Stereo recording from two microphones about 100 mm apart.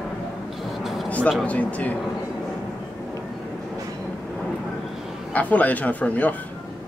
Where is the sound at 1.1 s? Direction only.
15° left (ahead or behind).